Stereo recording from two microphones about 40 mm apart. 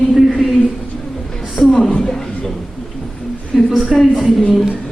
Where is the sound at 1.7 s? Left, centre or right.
Centre.